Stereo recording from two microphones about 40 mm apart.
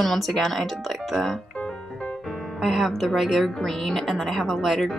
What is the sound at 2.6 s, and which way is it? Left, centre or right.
Speech, centre.